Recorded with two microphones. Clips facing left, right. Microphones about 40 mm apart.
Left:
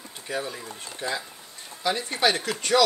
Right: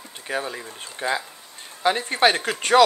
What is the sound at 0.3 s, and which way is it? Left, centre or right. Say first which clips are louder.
Speech: right 3 dB; right.